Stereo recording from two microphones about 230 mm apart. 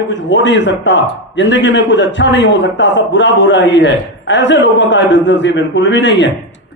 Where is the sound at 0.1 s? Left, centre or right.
Left.